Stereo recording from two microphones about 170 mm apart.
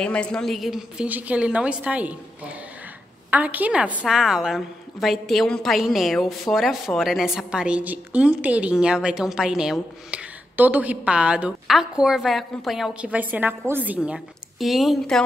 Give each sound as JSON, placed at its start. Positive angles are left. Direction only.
{"t": 0.0, "sound": "a woman's voice", "side_deg": 5}
{"t": 3.3, "sound": "a woman's voice", "side_deg": -10}